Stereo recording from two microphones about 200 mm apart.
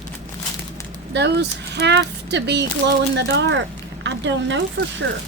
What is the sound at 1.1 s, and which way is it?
Speech, 60° right (ahead or behind).